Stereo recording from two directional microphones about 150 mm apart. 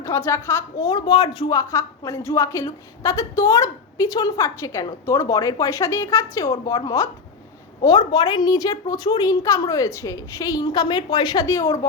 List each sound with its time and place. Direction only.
0.0 s a woman's voice: 20° left (ahead or behind)